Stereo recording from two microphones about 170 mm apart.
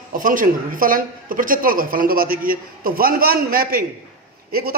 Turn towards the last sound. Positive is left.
turn(degrees=-65)  # may be behind; listen again after turning